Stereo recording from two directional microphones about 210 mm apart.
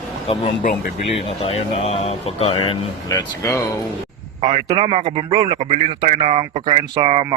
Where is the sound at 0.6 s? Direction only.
40° left (ahead or behind).